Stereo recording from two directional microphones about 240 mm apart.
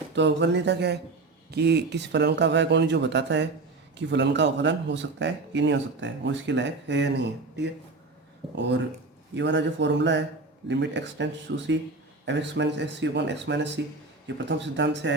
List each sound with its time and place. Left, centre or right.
0.2 s speech: right